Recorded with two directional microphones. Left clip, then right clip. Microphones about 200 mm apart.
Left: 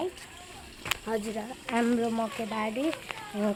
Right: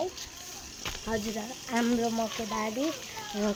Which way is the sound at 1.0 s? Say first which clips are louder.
Left 1 dB; centre (ahead or behind).